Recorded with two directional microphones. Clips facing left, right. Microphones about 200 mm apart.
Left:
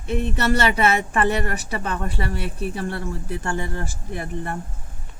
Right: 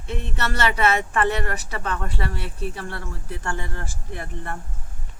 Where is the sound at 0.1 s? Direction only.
15° left (ahead or behind).